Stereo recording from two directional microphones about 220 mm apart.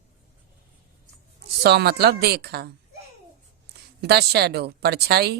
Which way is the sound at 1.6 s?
45° right (ahead or behind).